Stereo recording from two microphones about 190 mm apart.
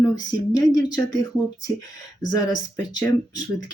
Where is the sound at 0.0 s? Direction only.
20° left (ahead or behind).